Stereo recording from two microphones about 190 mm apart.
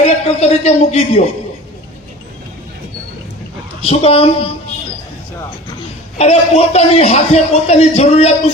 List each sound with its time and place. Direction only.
0.0 s speech: 35° left (ahead or behind)
3.8 s a man's voice: 30° left (ahead or behind)
6.1 s a man's voice: 35° left (ahead or behind)